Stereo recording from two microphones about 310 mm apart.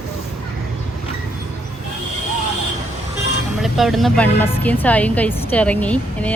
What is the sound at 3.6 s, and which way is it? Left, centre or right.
A woman's voice, centre.